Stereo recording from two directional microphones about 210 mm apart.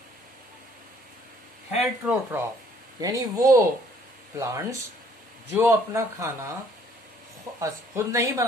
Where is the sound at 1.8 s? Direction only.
5° right (ahead or behind).